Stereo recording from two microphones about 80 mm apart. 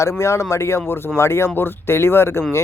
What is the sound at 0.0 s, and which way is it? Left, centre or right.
A man's voice, left.